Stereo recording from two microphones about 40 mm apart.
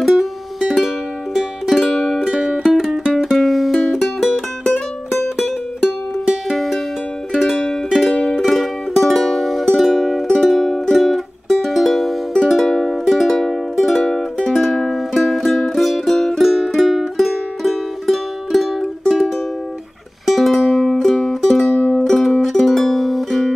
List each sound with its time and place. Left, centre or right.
0.0 s music: centre
6.5 s music: centre
8.1 s music: left
8.4 s music: centre
10.5 s music: centre
13.3 s music: centre
15.5 s music: centre
20.2 s music: centre
21.6 s music: centre
22.0 s music: centre